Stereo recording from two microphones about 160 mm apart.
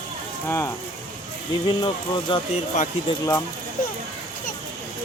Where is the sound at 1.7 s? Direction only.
30° left (ahead or behind).